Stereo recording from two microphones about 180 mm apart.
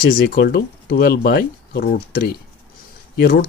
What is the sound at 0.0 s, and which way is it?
Speech, 55° left (ahead or behind).